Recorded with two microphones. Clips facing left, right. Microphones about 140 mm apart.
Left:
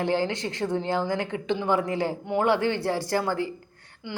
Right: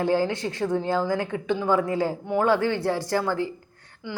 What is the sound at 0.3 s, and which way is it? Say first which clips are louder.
Speech: right 2 dB; 35° right (ahead or behind).